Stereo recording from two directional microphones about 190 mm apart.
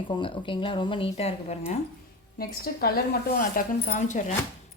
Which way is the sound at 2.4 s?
50° left (ahead or behind).